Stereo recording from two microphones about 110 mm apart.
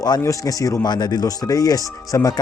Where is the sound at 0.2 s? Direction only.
30° left (ahead or behind).